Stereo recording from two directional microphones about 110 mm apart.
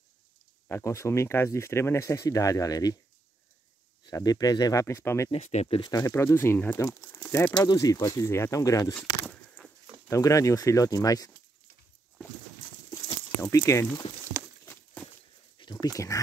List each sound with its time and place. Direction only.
0.7 s speech: 25° left (ahead or behind)
4.0 s speech: 35° left (ahead or behind)
5.3 s speech: 80° left
5.8 s speech: 35° left (ahead or behind)
8.9 s keys jangling: 10° left (ahead or behind)
10.0 s speech: 30° left (ahead or behind)
12.2 s a sound: 15° left (ahead or behind)
13.4 s speech: 25° left (ahead or behind)
15.6 s a sound: 40° left (ahead or behind)